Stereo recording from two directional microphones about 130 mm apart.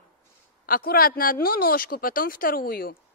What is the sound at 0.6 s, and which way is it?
Speech, 90° left.